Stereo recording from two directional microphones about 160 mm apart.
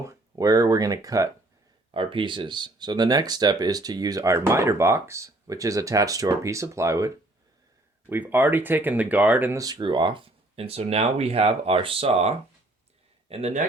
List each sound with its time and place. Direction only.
0.0 s speech: 20° right (ahead or behind)
1.9 s speech: 35° right (ahead or behind)
8.1 s speech: 10° right (ahead or behind); by 13.7 s 45° right (ahead or behind)